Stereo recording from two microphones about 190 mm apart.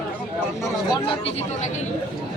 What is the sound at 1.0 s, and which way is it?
Speech, 30° left (ahead or behind).